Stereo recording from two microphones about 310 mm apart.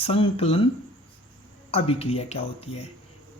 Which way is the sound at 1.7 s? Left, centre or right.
Centre.